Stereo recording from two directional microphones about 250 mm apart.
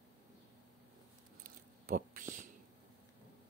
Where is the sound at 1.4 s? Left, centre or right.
Right.